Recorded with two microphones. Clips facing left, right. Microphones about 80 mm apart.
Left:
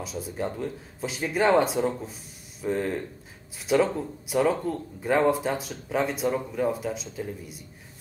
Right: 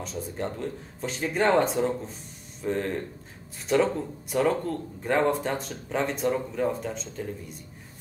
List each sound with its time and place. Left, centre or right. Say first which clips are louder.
0.0 s speech: left 1 dB; centre